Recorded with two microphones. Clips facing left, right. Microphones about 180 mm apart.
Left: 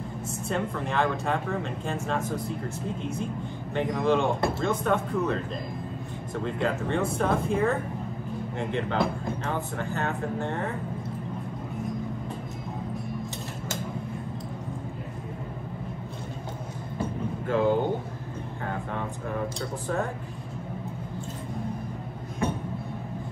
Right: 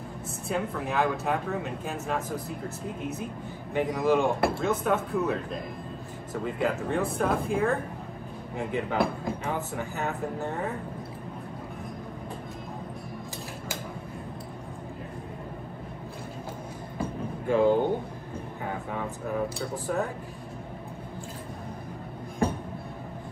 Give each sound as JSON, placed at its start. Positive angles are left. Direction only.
{"t": 0.5, "sound": "speech", "side_deg": -5}
{"t": 17.5, "sound": "speech", "side_deg": -10}
{"t": 22.4, "sound": "a sound", "side_deg": -35}